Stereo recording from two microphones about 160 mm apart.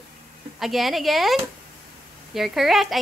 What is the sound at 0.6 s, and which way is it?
Speech, centre (ahead or behind).